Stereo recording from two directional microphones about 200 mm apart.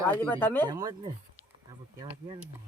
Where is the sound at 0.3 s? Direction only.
10° left (ahead or behind).